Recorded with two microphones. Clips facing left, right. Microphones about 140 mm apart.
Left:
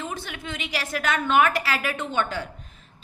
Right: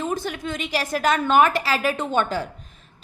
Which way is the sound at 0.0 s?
40° right (ahead or behind).